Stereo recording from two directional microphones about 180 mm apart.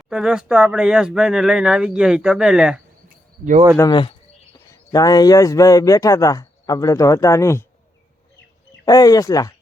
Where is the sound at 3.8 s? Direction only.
25° left (ahead or behind).